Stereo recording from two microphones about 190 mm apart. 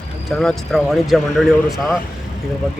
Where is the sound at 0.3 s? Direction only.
Centre (ahead or behind).